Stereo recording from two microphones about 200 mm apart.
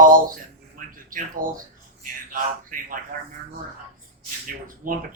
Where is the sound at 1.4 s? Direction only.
45° right (ahead or behind).